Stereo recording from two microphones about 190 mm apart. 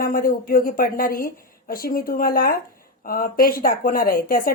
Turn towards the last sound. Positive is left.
turn(degrees=45)  # may be behind; listen again after turning